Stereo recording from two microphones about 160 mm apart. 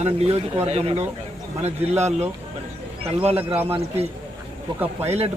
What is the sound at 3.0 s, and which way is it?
Speech, 40° right (ahead or behind).